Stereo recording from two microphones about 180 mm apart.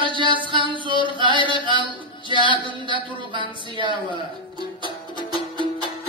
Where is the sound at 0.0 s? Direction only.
25° right (ahead or behind).